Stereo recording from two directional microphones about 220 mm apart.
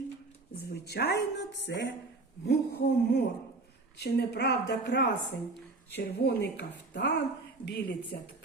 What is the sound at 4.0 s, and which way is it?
A woman's voice, 45° left (ahead or behind).